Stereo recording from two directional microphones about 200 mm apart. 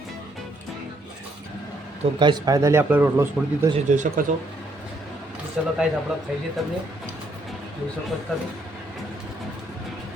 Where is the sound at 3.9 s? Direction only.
40° right (ahead or behind).